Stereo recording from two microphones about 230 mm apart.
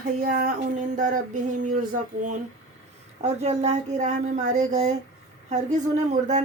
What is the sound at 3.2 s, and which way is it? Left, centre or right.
Speech, right.